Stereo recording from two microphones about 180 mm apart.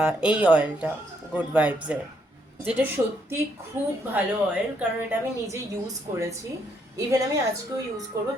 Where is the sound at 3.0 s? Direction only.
15° right (ahead or behind).